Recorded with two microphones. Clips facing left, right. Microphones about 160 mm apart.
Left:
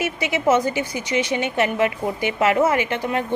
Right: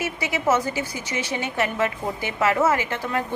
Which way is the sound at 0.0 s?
20° left (ahead or behind).